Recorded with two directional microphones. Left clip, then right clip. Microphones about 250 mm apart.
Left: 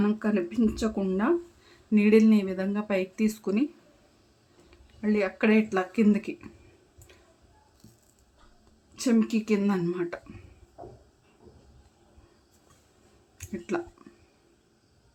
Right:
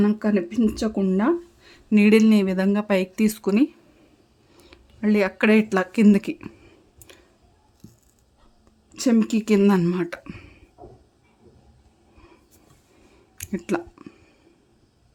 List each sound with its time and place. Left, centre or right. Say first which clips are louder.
0.0 s speech: right 5 dB; right
4.7 s speech: right 5 dB; right
7.1 s clicking: right 8 dB; right
7.8 s a sound: right 9 dB; centre
9.0 s speech: right 5 dB; right
13.4 s a sound: right 5 dB; right